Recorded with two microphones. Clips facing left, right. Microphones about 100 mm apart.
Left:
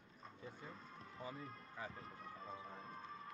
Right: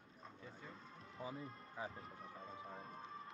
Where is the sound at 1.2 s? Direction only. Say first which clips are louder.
Right 2 dB; 15° right (ahead or behind).